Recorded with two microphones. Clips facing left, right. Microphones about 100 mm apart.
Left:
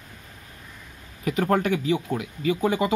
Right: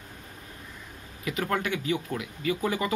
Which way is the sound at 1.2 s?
30° left (ahead or behind).